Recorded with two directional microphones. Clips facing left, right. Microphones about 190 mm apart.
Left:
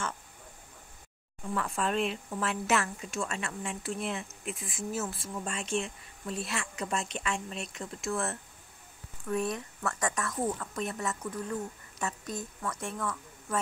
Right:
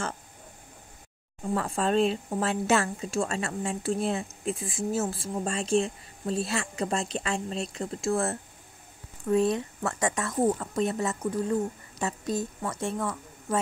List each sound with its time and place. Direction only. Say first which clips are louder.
1.4 s a woman's voice: right 4 dB; 30° right (ahead or behind)